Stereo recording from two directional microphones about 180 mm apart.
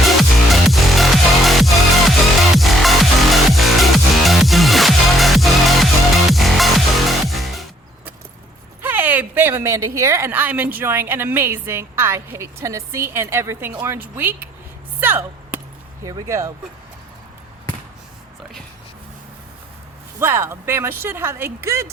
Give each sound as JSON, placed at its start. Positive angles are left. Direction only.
{"t": 0.2, "sound": "music", "side_deg": 0}
{"t": 8.8, "sound": "speech", "side_deg": -10}
{"t": 15.0, "sound": "chop", "side_deg": -10}
{"t": 16.0, "sound": "speech", "side_deg": -15}
{"t": 20.1, "sound": "speech", "side_deg": -15}